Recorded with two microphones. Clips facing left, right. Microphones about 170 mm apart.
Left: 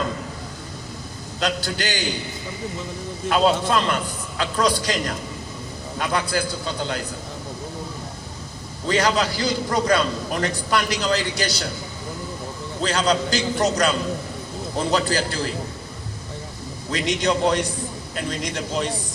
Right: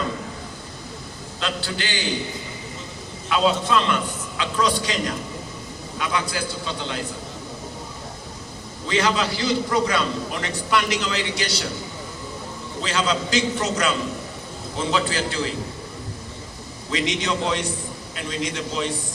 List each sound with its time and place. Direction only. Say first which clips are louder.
1.4 s a man's voice: left 3 dB; 40° left (ahead or behind)
3.2 s a man's voice: left 2 dB; 45° left (ahead or behind)
8.9 s a man's voice: left 2 dB; 40° left (ahead or behind)
12.8 s a man's voice: left 3 dB; 40° left (ahead or behind)
16.9 s a man's voice: left 2 dB; 40° left (ahead or behind)